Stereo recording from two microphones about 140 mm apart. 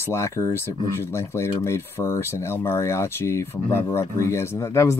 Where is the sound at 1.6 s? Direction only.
20° left (ahead or behind).